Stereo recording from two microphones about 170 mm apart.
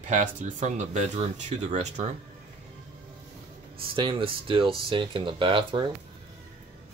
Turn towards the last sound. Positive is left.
turn(degrees=-30)  # may be behind; listen again after turning